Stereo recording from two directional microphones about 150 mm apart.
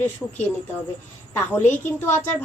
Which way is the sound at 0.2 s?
5° left (ahead or behind).